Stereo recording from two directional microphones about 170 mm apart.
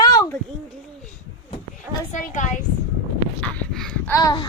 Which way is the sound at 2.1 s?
50° left (ahead or behind).